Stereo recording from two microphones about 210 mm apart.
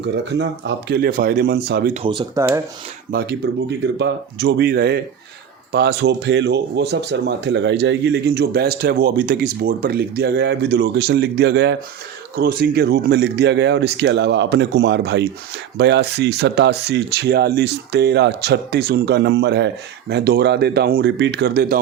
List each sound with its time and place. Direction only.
0.0 s speech: 55° right (ahead or behind)
1.9 s speech: 25° right (ahead or behind)
3.1 s speech: 50° right (ahead or behind)